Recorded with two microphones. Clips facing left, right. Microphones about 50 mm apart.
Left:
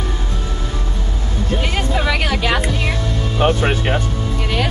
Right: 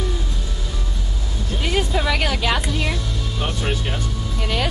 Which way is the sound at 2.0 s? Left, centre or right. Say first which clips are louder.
Left 2 dB; centre.